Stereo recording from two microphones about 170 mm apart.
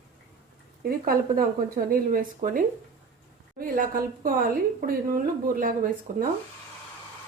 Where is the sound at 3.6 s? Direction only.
55° right (ahead or behind).